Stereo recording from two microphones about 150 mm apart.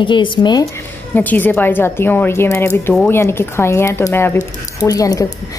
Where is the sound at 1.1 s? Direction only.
10° left (ahead or behind).